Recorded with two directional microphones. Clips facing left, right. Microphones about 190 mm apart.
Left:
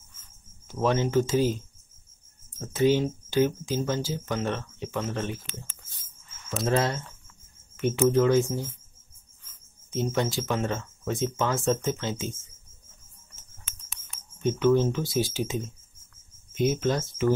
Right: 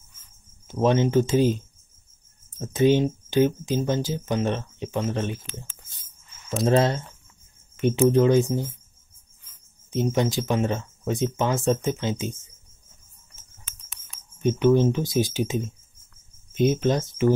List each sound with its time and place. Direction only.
0.7 s speech: 20° right (ahead or behind)
2.6 s speech: 20° right (ahead or behind)
6.7 s speech: 25° right (ahead or behind)
9.8 s speech: 15° right (ahead or behind)
14.4 s speech: 15° right (ahead or behind)